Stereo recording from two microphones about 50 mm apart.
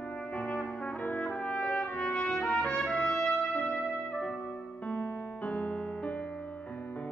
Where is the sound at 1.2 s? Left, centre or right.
Centre.